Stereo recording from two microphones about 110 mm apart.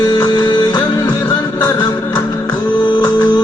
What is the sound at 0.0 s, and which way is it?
Music, 40° left (ahead or behind).